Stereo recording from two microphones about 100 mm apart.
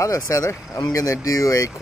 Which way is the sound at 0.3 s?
30° left (ahead or behind).